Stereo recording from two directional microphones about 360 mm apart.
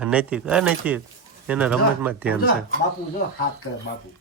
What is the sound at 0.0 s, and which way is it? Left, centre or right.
Speech, centre.